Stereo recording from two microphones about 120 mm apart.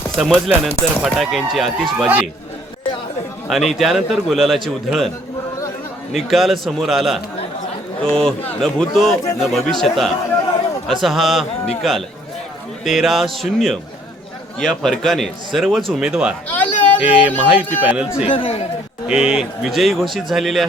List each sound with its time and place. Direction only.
0.2 s speech: centre (ahead or behind)
3.7 s speech: centre (ahead or behind)
6.1 s a man's voice: centre (ahead or behind)
16.5 s a sound: 15° left (ahead or behind)
17.0 s speech: 15° right (ahead or behind)
18.3 s speech: 50° left (ahead or behind)
19.0 s speech: 5° right (ahead or behind)